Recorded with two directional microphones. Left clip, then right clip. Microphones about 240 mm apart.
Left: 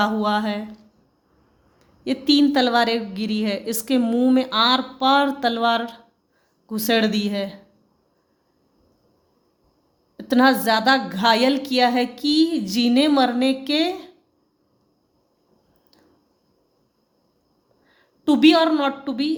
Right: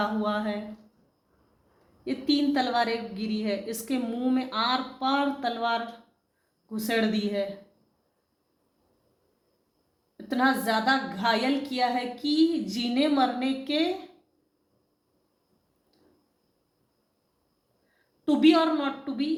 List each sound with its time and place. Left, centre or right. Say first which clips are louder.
0.0 s a woman's voice: left 7 dB; left
2.0 s a woman's voice: left 8 dB; left
10.2 s a woman's voice: left 8 dB; left
18.3 s a woman's voice: left 6 dB; left